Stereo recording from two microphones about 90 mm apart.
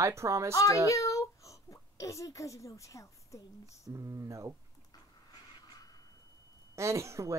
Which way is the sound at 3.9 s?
35° right (ahead or behind).